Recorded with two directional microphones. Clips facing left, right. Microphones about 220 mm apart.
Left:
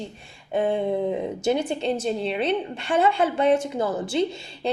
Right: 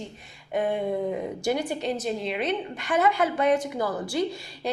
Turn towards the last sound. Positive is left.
turn(degrees=25)  # may be behind; listen again after turning